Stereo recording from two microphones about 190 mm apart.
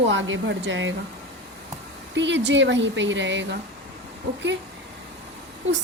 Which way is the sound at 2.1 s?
70° right (ahead or behind).